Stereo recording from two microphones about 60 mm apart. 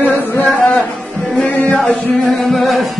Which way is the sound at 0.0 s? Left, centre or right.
Left.